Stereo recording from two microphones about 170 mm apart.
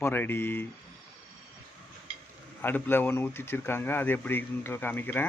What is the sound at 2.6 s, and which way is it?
Speech, 10° left (ahead or behind).